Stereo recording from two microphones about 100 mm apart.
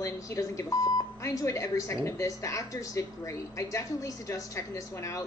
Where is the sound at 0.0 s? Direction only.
30° left (ahead or behind).